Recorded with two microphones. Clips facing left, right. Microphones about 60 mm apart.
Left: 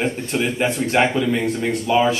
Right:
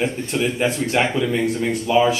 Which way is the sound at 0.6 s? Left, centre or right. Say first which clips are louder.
Left 3 dB; left.